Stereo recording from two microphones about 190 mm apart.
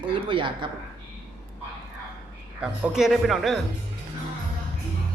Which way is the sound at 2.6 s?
Centre (ahead or behind).